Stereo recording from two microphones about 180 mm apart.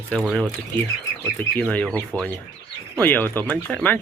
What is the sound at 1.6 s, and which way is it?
Speech, 5° left (ahead or behind).